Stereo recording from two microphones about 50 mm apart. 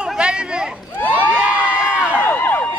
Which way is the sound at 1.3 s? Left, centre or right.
Right.